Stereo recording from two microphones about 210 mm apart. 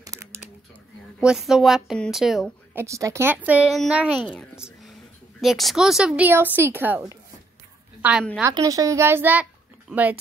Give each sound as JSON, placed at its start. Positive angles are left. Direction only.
{"t": 0.0, "sound": "a sound", "side_deg": -15}
{"t": 1.2, "sound": "a woman's voice", "side_deg": 0}
{"t": 2.8, "sound": "a woman's voice", "side_deg": -15}
{"t": 8.4, "sound": "a child's voice", "side_deg": -15}